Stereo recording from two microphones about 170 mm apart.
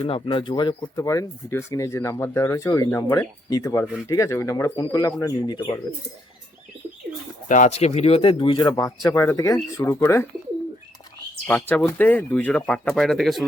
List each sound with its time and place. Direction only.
0.0 s speech: 30° left (ahead or behind)
7.4 s speech: 50° left (ahead or behind); by 10.2 s 15° left (ahead or behind)
11.4 s speech: 10° left (ahead or behind)